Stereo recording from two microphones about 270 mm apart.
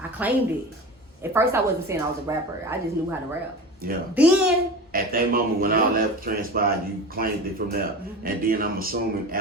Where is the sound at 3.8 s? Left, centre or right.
Right.